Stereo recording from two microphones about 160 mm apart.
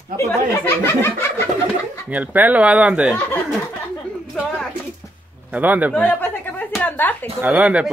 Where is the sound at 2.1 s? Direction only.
10° right (ahead or behind).